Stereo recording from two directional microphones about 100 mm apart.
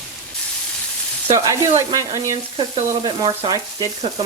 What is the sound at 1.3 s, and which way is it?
Speech, 30° right (ahead or behind).